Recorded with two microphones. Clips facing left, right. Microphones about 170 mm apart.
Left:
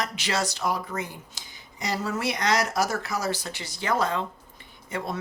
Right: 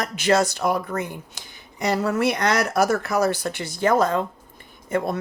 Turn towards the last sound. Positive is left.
turn(degrees=-50)  # may be behind; listen again after turning